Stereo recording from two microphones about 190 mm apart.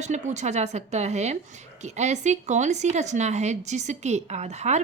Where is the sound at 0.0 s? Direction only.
40° right (ahead or behind).